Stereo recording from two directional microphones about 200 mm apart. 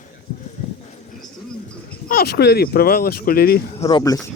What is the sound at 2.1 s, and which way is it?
Speech, 50° left (ahead or behind).